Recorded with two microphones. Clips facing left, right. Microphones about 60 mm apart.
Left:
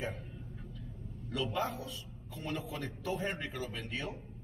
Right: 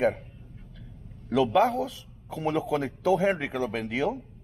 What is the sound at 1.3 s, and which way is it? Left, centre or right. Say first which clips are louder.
A man's voice: right 13 dB; right.